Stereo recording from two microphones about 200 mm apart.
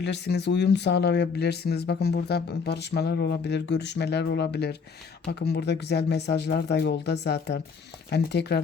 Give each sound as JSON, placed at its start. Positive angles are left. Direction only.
{"t": 0.0, "sound": "speech", "side_deg": 55}